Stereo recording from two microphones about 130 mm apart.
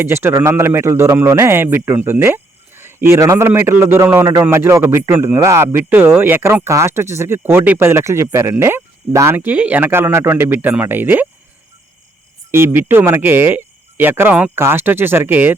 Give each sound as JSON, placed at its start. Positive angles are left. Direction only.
{"t": 0.0, "sound": "speech", "side_deg": -15}
{"t": 12.5, "sound": "speech", "side_deg": -20}